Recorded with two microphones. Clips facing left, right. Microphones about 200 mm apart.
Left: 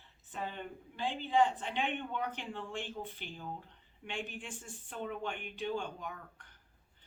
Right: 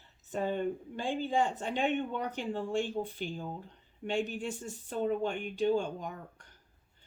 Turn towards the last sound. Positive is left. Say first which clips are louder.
# right 4 dB
turn(degrees=-40)  # may be behind; listen again after turning